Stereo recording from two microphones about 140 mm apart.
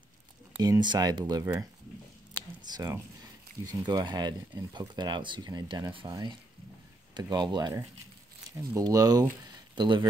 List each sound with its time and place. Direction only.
0.6 s speech: 30° right (ahead or behind)
2.7 s speech: 25° right (ahead or behind)